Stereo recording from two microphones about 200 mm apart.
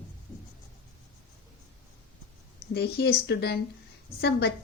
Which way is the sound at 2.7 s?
55° left (ahead or behind).